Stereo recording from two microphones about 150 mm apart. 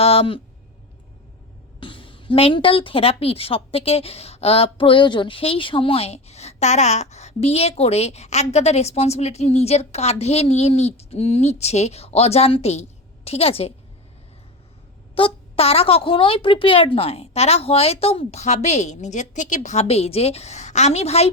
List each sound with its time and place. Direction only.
0.0 s a sound: 40° left (ahead or behind)
1.8 s a woman's voice: 35° left (ahead or behind)
15.1 s a woman's voice: 40° left (ahead or behind)